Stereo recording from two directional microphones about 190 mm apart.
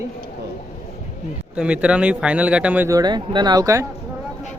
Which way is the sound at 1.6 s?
5° right (ahead or behind).